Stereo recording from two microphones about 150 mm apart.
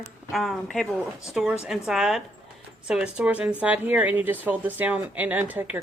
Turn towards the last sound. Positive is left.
turn(degrees=-10)  # may be behind; listen again after turning